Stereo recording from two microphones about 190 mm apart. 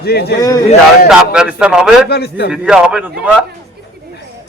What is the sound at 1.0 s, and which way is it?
Speech, 5° right (ahead or behind).